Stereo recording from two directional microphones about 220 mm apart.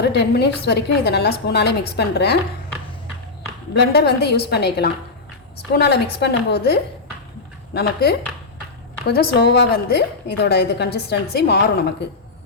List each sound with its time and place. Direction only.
0.0 s a woman's voice: 50° left (ahead or behind)
3.8 s a woman's voice: 50° left (ahead or behind)